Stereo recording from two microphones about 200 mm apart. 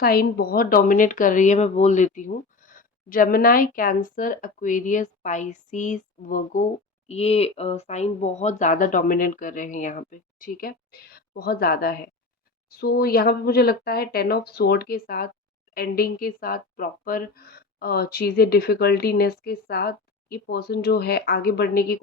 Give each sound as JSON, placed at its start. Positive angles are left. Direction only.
{"t": 0.0, "sound": "speech", "side_deg": 50}
{"t": 7.1, "sound": "speech", "side_deg": 30}